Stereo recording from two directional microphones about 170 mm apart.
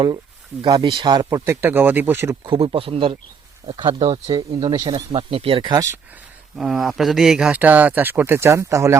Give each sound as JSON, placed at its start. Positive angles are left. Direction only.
{"t": 0.6, "sound": "speech", "side_deg": -25}
{"t": 1.6, "sound": "speech", "side_deg": -10}
{"t": 2.5, "sound": "a man's voice", "side_deg": -30}
{"t": 6.6, "sound": "speech", "side_deg": 0}